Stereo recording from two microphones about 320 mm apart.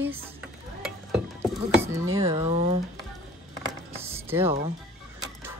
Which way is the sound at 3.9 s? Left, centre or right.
Centre.